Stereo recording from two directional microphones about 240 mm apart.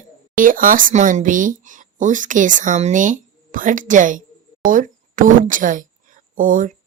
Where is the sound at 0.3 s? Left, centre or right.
Right.